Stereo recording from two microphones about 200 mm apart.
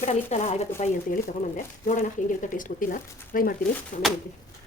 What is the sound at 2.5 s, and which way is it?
Speech, 40° left (ahead or behind).